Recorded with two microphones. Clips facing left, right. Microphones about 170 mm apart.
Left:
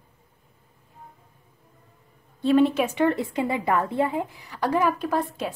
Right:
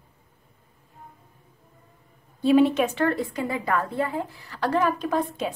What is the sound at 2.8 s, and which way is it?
A woman's voice, 15° left (ahead or behind).